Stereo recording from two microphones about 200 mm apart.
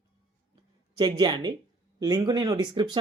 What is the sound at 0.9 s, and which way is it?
Speech, 20° right (ahead or behind).